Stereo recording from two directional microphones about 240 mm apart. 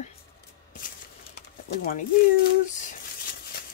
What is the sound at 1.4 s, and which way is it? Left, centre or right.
Pigeon, left.